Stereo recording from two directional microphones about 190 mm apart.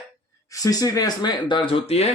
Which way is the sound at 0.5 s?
20° left (ahead or behind).